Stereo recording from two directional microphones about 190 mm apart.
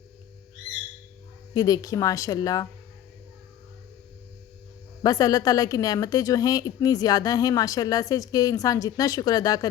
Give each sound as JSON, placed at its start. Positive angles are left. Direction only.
{"t": 1.5, "sound": "a woman's voice", "side_deg": 20}
{"t": 5.0, "sound": "a woman's voice", "side_deg": 20}